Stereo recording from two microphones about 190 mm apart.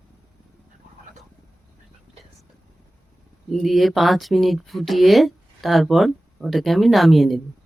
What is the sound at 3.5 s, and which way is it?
Speech, centre (ahead or behind).